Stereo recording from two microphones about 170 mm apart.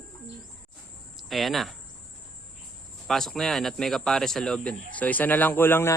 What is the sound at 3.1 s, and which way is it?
Speech, centre (ahead or behind).